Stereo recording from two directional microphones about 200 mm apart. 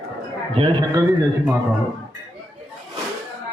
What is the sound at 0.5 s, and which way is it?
Speech, 20° right (ahead or behind).